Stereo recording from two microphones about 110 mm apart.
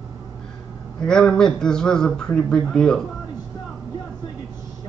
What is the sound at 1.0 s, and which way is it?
Speech, 5° left (ahead or behind).